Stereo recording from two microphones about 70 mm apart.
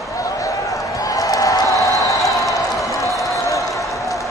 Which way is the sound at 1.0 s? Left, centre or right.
Left.